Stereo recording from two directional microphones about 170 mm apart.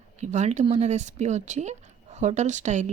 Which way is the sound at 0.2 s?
45° right (ahead or behind).